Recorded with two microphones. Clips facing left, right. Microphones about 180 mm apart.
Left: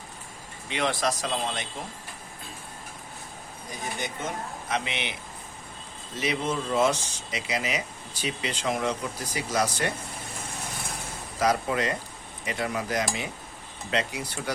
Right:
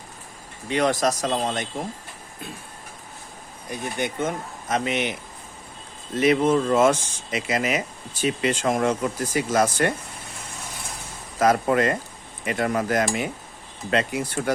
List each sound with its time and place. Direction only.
0.7 s speech: 45° right (ahead or behind)
3.7 s speech: 60° right (ahead or behind)
4.7 s speech: 45° right (ahead or behind)
6.1 s speech: 55° right (ahead or behind)
11.3 s speech: 55° right (ahead or behind)